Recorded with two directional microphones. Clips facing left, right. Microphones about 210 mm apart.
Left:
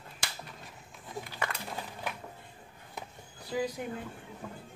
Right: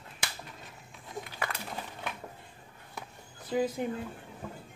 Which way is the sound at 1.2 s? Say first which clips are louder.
Even; centre (ahead or behind).